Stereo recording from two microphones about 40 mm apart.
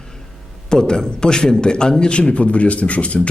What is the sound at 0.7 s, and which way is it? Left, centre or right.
A man's voice, centre.